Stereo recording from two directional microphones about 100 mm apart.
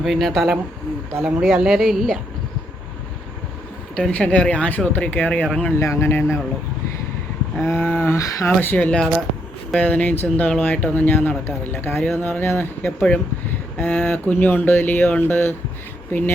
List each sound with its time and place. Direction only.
0.0 s speech: centre (ahead or behind)
3.9 s speech: 10° left (ahead or behind)
5.7 s speech: 30° left (ahead or behind)
7.6 s speech: 25° left (ahead or behind)